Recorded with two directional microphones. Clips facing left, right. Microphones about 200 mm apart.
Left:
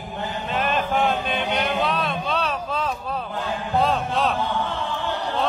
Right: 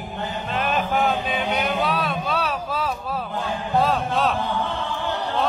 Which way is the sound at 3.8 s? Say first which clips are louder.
Right 1 dB; centre (ahead or behind).